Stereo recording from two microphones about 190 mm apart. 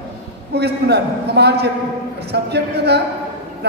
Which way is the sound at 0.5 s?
60° right (ahead or behind).